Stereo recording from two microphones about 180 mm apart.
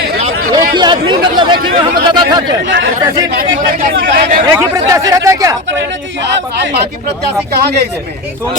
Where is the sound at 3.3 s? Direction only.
55° right (ahead or behind).